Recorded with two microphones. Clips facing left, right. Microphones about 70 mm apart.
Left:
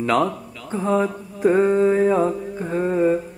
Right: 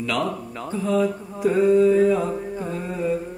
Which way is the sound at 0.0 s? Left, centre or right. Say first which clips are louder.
Left 5 dB; left.